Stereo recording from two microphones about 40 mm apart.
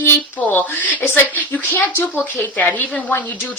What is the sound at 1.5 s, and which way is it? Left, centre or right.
Speech, left.